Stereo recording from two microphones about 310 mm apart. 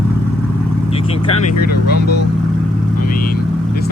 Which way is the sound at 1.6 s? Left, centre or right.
Left.